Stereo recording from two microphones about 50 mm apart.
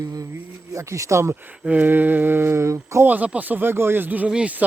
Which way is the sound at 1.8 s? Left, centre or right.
Right.